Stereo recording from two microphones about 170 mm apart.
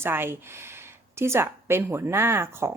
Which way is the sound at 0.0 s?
15° right (ahead or behind).